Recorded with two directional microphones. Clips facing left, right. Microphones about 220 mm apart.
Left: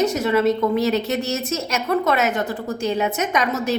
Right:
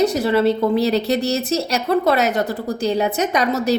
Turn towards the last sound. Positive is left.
turn(degrees=-35)  # may be behind; listen again after turning